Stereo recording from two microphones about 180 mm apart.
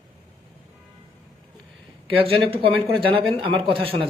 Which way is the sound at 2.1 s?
30° right (ahead or behind).